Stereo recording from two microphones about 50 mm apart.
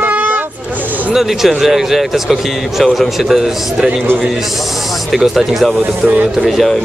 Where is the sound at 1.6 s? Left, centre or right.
Centre.